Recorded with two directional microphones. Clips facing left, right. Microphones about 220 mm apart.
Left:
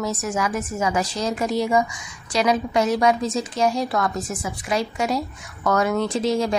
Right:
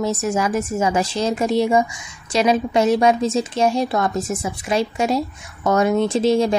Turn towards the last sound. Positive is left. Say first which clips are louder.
# right 5 dB
turn(degrees=-25)  # may be behind; listen again after turning